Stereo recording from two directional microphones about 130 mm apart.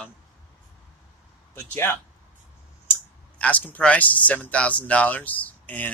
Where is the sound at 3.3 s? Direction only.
10° left (ahead or behind).